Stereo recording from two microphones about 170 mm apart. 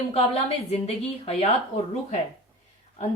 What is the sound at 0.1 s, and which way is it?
A woman's voice, 35° left (ahead or behind).